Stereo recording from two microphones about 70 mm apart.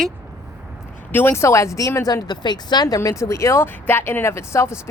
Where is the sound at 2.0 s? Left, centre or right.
Left.